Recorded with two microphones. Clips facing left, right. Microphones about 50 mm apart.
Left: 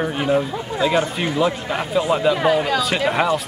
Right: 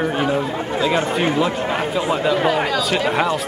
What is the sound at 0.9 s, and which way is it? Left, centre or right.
Speech, right.